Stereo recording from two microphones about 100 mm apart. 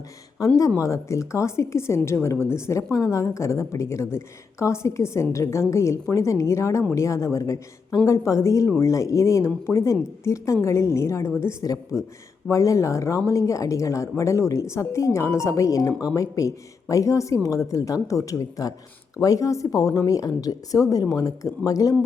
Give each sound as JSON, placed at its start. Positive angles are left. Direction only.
{"t": 0.3, "sound": "a woman's voice", "side_deg": 35}